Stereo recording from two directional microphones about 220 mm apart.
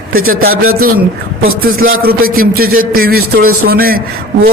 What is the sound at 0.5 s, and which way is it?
Speech, 75° right (ahead or behind).